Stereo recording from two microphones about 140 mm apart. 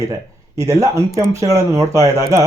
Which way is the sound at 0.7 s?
25° right (ahead or behind).